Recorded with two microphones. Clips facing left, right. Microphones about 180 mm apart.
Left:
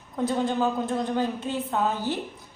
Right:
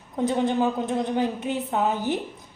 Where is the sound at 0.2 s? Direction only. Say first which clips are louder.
Right 2 dB; 20° right (ahead or behind).